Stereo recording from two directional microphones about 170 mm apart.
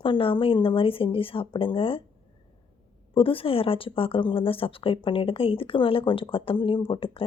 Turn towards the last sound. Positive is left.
turn(degrees=30)  # may be behind; listen again after turning